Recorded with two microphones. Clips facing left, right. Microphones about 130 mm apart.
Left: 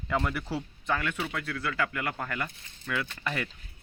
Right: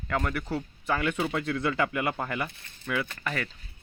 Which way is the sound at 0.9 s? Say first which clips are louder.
Right 3 dB; 15° right (ahead or behind).